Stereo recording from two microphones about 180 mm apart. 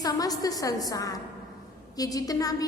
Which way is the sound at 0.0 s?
20° left (ahead or behind).